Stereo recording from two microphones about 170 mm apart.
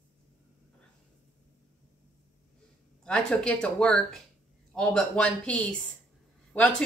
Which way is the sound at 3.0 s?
5° left (ahead or behind).